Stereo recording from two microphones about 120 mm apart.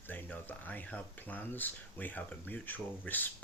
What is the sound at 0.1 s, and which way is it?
Speech, 15° left (ahead or behind).